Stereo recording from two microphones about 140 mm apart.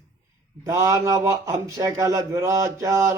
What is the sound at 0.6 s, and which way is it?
Speech, 25° right (ahead or behind).